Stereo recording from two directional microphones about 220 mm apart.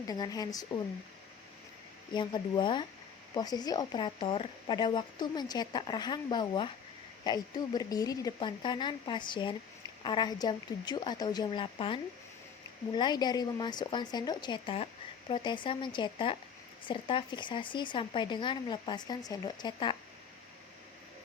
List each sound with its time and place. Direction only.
0.1 s speech: 15° left (ahead or behind)
2.1 s speech: 20° left (ahead or behind)